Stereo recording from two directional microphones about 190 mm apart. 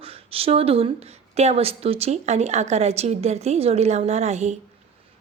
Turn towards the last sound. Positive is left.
turn(degrees=-35)  # may be behind; listen again after turning